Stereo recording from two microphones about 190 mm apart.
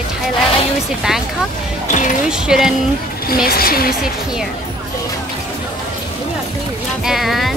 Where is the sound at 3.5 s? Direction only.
50° left (ahead or behind).